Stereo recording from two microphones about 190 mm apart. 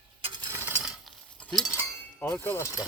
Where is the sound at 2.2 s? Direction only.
10° left (ahead or behind).